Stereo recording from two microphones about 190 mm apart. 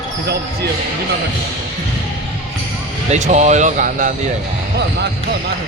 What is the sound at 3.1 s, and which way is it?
Speech, 40° right (ahead or behind).